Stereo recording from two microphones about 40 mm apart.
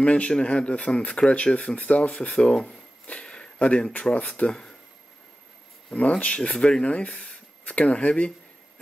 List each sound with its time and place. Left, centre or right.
0.0 s speech: left
3.1 s a sound: left
4.0 s speech: left
5.9 s speech: left